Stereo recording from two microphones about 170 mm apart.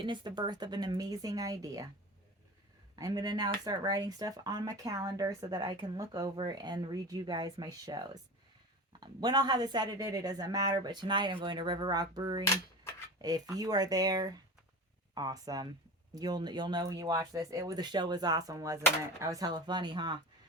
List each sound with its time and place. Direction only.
0.0 s speech: 25° right (ahead or behind)
2.9 s speech: 25° right (ahead or behind)